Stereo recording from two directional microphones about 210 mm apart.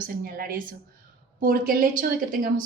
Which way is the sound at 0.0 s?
45° right (ahead or behind).